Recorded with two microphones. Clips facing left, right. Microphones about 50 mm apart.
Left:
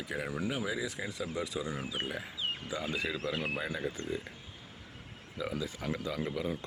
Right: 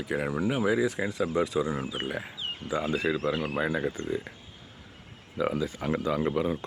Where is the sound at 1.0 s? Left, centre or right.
Right.